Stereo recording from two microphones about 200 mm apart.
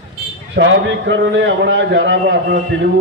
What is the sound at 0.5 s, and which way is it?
A man's voice, 65° right (ahead or behind).